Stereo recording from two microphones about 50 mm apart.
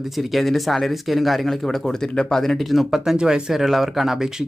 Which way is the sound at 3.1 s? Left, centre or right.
Centre.